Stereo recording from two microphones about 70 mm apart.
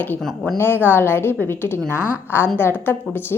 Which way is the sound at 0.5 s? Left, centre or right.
Left.